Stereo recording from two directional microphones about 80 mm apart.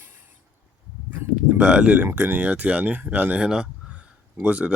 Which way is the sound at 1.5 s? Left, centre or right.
Centre.